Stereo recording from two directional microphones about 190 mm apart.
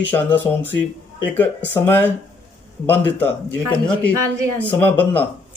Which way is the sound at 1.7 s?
10° left (ahead or behind).